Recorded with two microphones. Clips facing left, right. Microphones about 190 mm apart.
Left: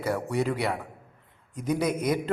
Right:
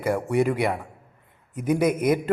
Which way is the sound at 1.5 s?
10° right (ahead or behind).